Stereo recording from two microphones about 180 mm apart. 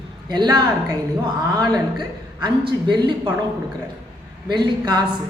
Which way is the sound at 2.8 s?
25° right (ahead or behind).